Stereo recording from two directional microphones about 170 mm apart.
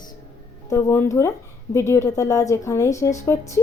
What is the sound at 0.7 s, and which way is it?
Speech, 15° left (ahead or behind).